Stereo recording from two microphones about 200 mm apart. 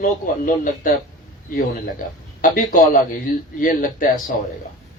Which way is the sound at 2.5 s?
40° left (ahead or behind).